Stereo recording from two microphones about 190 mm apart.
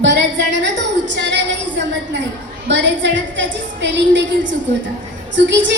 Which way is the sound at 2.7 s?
70° right (ahead or behind).